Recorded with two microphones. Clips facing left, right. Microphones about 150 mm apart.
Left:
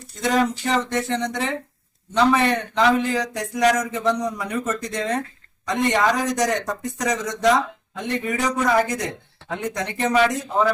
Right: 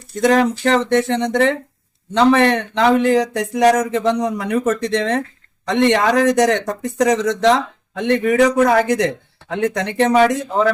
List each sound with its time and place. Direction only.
0.2 s a man's voice: 70° right (ahead or behind)